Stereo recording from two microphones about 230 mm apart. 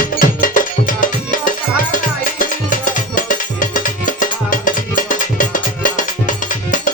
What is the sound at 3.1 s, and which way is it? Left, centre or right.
Music, left.